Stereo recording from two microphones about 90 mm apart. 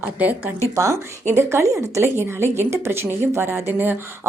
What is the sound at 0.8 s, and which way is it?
A woman's voice, 30° right (ahead or behind).